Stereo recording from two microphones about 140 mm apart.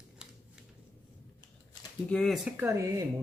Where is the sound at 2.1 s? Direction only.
5° left (ahead or behind).